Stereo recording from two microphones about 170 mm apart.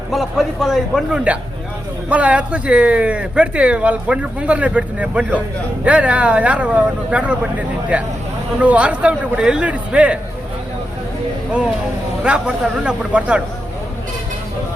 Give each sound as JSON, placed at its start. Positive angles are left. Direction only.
{"t": 0.1, "sound": "a man's voice", "side_deg": 0}
{"t": 8.6, "sound": "speech", "side_deg": -5}
{"t": 12.2, "sound": "a man's voice", "side_deg": -5}